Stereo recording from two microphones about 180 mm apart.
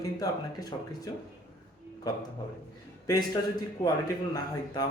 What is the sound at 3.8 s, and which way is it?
Speech, 20° left (ahead or behind).